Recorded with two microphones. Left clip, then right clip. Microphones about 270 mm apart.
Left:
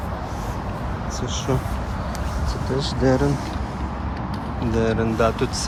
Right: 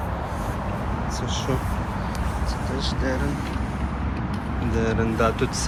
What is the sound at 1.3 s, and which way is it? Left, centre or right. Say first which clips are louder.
Speech: left 3 dB; left.